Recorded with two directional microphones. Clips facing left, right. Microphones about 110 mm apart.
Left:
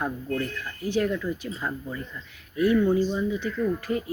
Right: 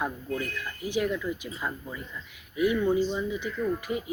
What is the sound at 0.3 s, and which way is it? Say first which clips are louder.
Speech: left 3 dB; 10° right (ahead or behind).